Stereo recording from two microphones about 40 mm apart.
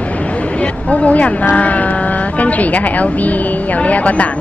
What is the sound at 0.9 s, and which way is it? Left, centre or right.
Speech, left.